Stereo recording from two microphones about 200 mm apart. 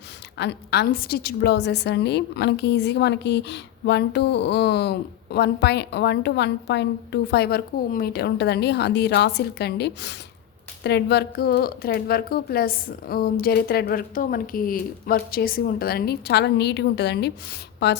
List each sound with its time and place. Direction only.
0.3 s a woman's voice: 55° left (ahead or behind)